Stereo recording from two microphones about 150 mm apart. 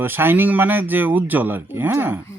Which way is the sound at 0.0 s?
15° right (ahead or behind).